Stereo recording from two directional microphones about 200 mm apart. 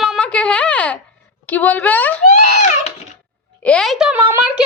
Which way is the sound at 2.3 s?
35° left (ahead or behind).